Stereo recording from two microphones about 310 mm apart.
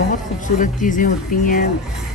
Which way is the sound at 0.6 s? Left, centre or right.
Left.